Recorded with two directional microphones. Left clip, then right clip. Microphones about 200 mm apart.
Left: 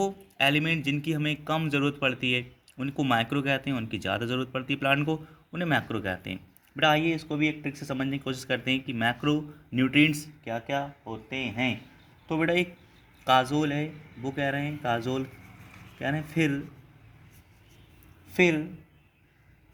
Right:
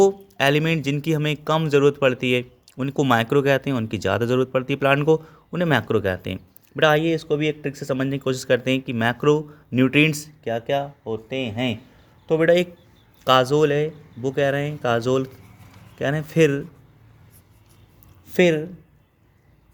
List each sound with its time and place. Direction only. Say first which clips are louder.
0.0 s speech: right 8 dB; 45° right (ahead or behind)
18.3 s speech: right 6 dB; 55° right (ahead or behind)